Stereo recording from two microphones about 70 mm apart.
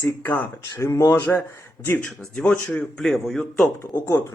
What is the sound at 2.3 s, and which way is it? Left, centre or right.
Speech, centre.